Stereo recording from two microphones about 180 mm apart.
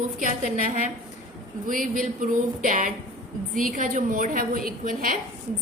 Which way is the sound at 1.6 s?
50° right (ahead or behind).